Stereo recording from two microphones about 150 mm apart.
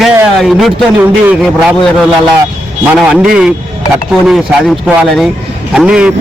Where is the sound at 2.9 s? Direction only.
Centre (ahead or behind).